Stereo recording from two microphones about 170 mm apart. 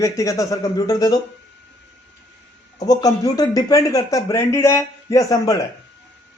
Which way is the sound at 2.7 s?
20° left (ahead or behind).